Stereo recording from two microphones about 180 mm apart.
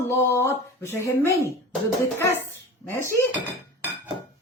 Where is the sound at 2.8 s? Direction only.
10° left (ahead or behind).